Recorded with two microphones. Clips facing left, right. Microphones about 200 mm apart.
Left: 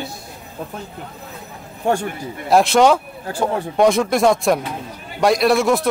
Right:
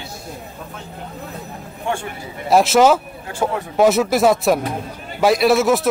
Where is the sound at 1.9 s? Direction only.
40° left (ahead or behind).